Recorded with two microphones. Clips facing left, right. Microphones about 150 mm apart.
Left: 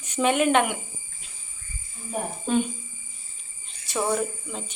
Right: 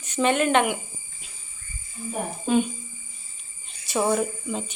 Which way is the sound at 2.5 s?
10° right (ahead or behind).